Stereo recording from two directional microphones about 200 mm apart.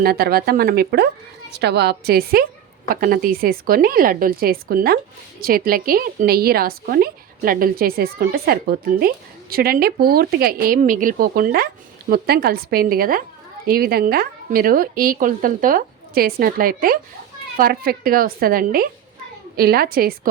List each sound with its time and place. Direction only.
0.0 s a woman's voice: 50° right (ahead or behind)